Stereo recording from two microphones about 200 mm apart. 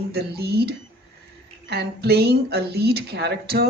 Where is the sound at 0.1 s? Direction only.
55° right (ahead or behind).